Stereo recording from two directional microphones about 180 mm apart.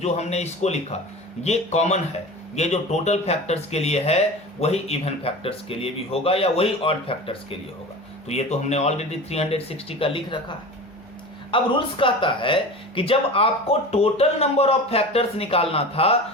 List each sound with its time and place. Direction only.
0.0 s speech: 35° left (ahead or behind)
11.5 s speech: 30° left (ahead or behind)